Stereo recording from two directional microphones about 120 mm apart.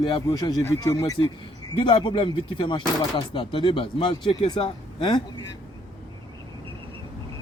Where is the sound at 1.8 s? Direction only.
45° left (ahead or behind).